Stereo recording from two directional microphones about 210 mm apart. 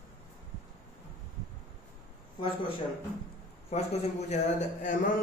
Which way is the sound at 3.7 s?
30° left (ahead or behind).